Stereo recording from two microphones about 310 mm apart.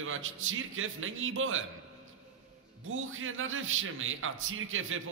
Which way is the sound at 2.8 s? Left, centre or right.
Right.